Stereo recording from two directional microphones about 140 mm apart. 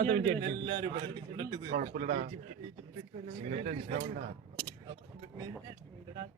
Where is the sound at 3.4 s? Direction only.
50° right (ahead or behind).